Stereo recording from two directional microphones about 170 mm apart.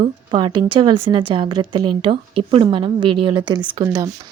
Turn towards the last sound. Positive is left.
turn(degrees=-20)  # may be behind; listen again after turning